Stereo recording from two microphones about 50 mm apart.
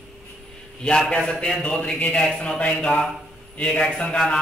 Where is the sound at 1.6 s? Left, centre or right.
Left.